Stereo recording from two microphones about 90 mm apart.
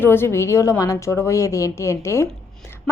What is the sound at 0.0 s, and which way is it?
A woman's voice, 25° left (ahead or behind).